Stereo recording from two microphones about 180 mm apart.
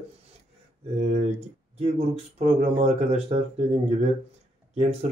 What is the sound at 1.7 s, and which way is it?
Speech, 35° right (ahead or behind).